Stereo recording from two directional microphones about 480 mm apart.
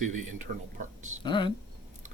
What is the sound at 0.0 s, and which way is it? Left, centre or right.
Speech, centre.